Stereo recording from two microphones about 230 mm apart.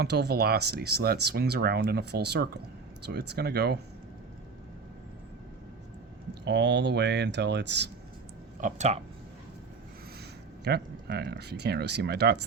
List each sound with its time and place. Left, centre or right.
0.0 s speech: right
6.4 s speech: right
8.6 s speech: right
10.6 s speech: right